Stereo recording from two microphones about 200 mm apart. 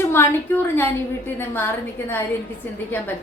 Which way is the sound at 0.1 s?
10° left (ahead or behind).